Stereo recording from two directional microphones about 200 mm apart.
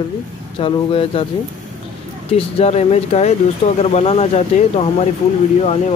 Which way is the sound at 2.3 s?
30° left (ahead or behind).